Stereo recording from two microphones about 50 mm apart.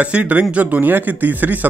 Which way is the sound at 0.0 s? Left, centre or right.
Right.